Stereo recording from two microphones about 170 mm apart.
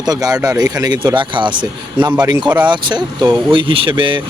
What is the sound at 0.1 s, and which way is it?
Speech, 20° right (ahead or behind).